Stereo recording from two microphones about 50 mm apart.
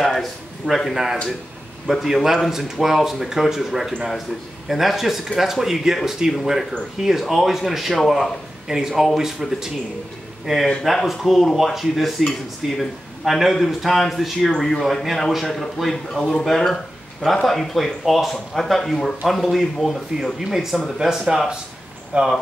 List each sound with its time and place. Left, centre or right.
0.0 s a man's voice: centre
20.3 s speech: centre
22.1 s speech: right